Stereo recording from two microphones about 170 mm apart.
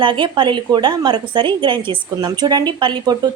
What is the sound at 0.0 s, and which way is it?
A woman's voice, 30° right (ahead or behind).